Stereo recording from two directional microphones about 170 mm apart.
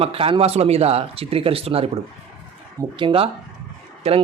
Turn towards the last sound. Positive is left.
turn(degrees=-40)  # may be behind; listen again after turning